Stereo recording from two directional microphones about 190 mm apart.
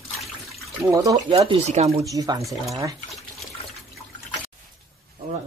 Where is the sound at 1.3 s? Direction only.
30° right (ahead or behind).